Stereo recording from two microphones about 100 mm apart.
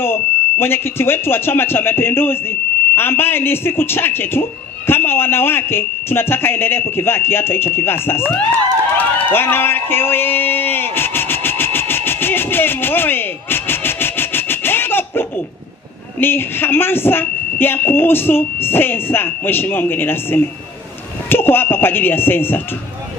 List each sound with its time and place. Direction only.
0.0 s speech: 25° left (ahead or behind)
8.9 s a sound: 20° left (ahead or behind)
16.2 s speech: 20° left (ahead or behind)